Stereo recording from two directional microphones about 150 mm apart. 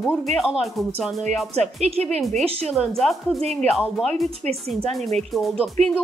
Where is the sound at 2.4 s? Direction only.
Centre (ahead or behind).